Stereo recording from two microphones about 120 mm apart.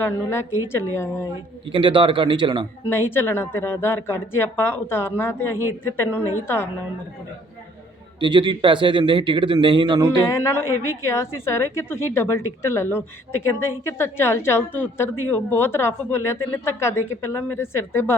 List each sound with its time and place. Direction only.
0.0 s a woman's voice: 20° left (ahead or behind)
1.6 s a man's voice: 45° right (ahead or behind)
2.9 s a woman's voice: 20° left (ahead or behind)
8.2 s a man's voice: 40° right (ahead or behind)
10.2 s a woman's voice: 25° left (ahead or behind)